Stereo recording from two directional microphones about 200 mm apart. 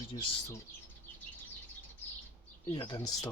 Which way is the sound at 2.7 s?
25° left (ahead or behind).